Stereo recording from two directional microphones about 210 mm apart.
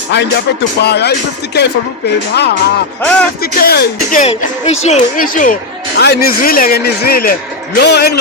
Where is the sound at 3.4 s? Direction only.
45° left (ahead or behind).